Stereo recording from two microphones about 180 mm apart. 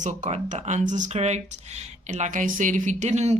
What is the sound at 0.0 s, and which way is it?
A woman's voice, 40° right (ahead or behind).